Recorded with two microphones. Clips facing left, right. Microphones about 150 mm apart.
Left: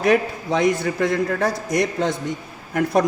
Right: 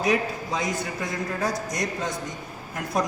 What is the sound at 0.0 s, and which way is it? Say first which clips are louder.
A man's voice: left 6 dB; 60° left (ahead or behind).